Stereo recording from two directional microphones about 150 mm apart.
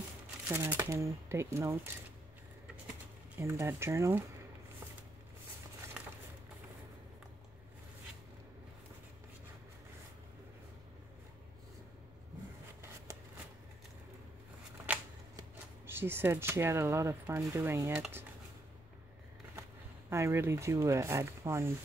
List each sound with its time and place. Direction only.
0.5 s speech: 15° right (ahead or behind)
3.3 s speech: 15° right (ahead or behind)
15.9 s speech: 15° right (ahead or behind)
20.1 s speech: 15° right (ahead or behind)